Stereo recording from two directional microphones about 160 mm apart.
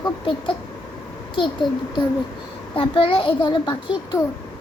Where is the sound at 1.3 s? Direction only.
30° left (ahead or behind).